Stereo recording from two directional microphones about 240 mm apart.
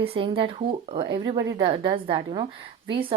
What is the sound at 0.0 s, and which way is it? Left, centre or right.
A woman's voice, right.